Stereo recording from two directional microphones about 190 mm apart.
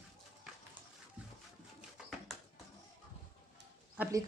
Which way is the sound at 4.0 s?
15° right (ahead or behind).